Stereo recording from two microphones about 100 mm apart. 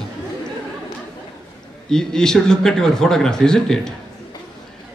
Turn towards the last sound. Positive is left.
turn(degrees=5)  # may be behind; listen again after turning